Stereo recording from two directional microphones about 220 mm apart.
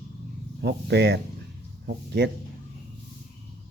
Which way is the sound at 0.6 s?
50° right (ahead or behind).